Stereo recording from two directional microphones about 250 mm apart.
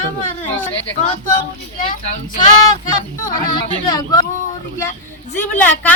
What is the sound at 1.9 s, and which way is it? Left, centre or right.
Speech, left.